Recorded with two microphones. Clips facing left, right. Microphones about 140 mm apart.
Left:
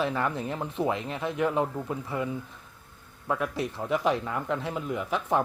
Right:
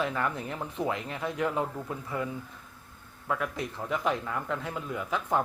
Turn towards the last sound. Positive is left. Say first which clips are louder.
# left 2 dB
turn(degrees=20)  # may be behind; listen again after turning